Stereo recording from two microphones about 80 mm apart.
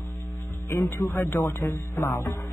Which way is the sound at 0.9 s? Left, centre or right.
Left.